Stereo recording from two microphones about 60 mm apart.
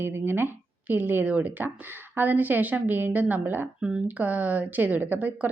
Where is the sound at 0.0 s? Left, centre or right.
Right.